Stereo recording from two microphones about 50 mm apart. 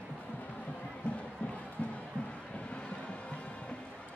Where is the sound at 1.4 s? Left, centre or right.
Left.